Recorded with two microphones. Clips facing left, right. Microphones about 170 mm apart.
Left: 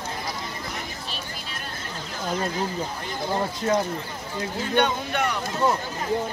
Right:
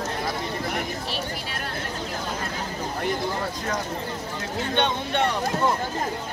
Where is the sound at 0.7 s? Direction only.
65° right (ahead or behind).